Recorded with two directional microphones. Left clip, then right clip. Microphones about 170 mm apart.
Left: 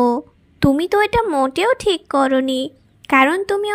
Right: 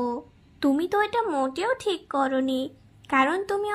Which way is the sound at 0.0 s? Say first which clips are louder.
Left 12 dB; 35° left (ahead or behind).